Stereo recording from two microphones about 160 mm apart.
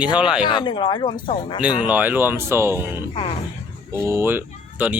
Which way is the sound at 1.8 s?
10° right (ahead or behind).